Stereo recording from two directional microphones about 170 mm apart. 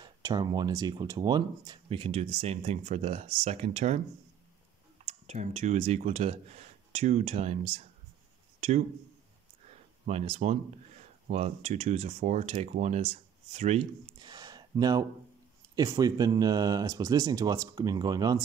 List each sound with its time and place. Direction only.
0.0 s speech: 25° right (ahead or behind); by 4.0 s 40° right (ahead or behind)
5.0 s speech: 40° right (ahead or behind)
8.5 s a sound: 40° right (ahead or behind)
9.7 s speech: 40° right (ahead or behind)
14.2 s a sound: 25° right (ahead or behind)
15.7 s speech: 20° right (ahead or behind)